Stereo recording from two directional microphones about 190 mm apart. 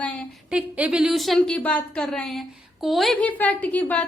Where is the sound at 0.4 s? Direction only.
5° right (ahead or behind).